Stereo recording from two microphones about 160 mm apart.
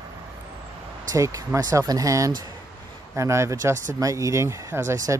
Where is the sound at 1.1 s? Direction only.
20° right (ahead or behind).